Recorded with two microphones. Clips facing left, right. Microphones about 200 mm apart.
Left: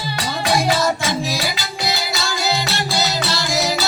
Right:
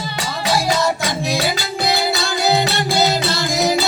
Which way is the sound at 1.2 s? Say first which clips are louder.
Right 4 dB; 60° right (ahead or behind).